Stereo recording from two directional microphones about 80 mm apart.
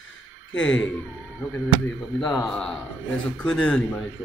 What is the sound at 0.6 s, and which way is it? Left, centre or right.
Speech, centre.